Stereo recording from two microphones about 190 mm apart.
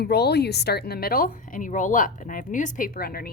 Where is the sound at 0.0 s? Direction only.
60° left (ahead or behind).